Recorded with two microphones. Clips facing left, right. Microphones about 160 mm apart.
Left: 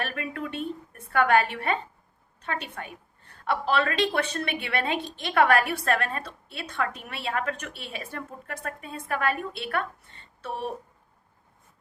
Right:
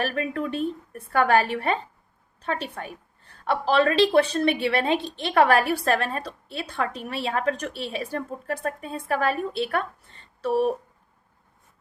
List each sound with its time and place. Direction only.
0.0 s a woman's voice: 35° right (ahead or behind)